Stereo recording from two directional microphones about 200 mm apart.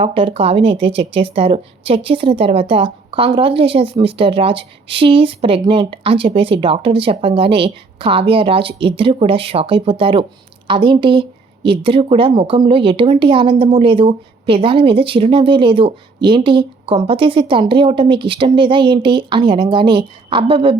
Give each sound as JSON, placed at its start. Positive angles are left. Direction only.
{"t": 0.0, "sound": "speech", "side_deg": -25}